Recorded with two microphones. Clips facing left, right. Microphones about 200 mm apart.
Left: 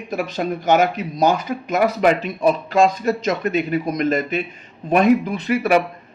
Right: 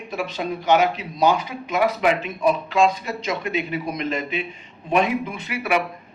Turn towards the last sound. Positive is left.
turn(degrees=40)  # may be behind; listen again after turning